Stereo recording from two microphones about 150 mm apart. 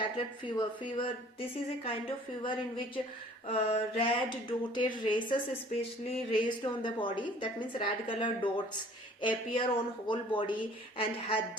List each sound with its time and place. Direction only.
0.4 s speech: 35° left (ahead or behind)